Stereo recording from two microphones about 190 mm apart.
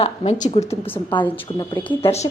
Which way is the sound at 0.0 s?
35° left (ahead or behind).